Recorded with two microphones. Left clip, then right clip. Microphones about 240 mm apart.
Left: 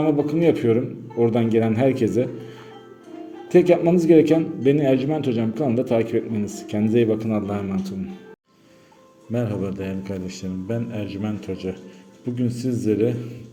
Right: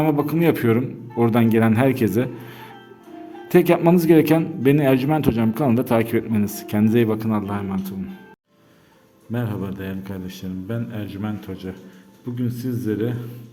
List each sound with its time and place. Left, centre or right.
0.0 s a man's voice: right
3.5 s a man's voice: right
9.3 s a man's voice: centre